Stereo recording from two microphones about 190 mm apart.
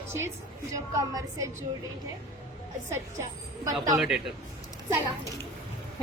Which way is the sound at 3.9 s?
5° right (ahead or behind).